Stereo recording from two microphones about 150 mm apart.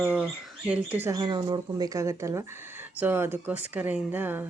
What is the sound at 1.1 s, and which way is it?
Speech, 30° right (ahead or behind).